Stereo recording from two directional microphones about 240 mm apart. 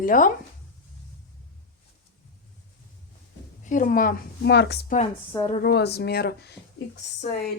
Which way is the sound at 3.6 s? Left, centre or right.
Left.